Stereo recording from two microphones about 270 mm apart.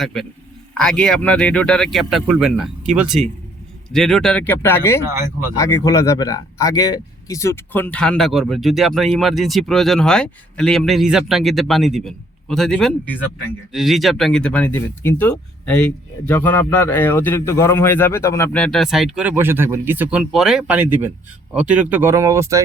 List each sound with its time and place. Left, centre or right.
0.0 s speech: centre